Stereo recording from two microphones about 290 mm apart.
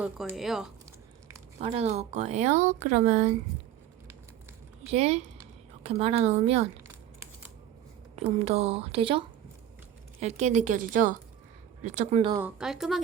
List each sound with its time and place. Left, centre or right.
0.0 s speech: centre
1.5 s speech: right
4.9 s speech: right
8.1 s speech: right
12.5 s speech: centre